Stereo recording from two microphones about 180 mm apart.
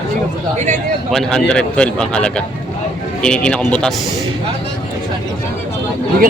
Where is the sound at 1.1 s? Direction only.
5° left (ahead or behind).